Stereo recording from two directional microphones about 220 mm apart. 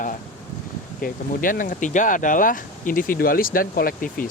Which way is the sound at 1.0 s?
40° left (ahead or behind).